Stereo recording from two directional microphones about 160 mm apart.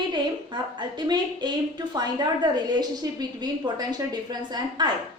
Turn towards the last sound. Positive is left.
turn(degrees=-25)  # may be behind; listen again after turning